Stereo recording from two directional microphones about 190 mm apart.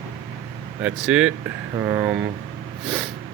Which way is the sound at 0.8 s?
5° right (ahead or behind).